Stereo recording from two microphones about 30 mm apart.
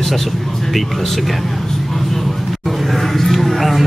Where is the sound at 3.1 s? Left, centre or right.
Centre.